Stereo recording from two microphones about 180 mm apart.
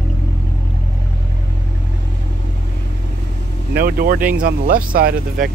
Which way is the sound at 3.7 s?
55° right (ahead or behind).